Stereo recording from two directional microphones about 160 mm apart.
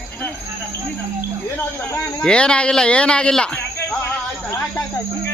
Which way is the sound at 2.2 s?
5° left (ahead or behind).